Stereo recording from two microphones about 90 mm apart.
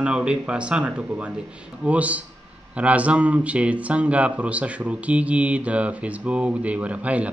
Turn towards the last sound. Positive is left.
turn(degrees=-15)  # may be behind; listen again after turning